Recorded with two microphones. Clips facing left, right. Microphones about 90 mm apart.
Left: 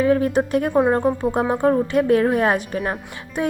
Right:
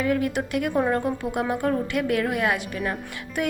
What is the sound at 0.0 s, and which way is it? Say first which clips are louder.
A woman's voice: left 6 dB; 35° left (ahead or behind).